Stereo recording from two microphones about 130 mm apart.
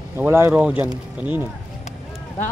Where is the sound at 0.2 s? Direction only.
15° right (ahead or behind).